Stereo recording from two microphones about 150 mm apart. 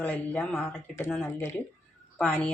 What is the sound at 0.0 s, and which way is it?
A woman's voice, 10° left (ahead or behind).